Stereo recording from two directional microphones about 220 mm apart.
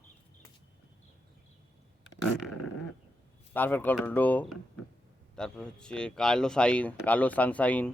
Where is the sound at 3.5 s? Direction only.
10° left (ahead or behind).